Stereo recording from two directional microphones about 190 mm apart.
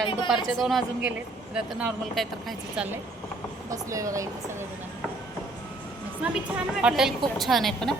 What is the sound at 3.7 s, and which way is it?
Speech, 15° right (ahead or behind).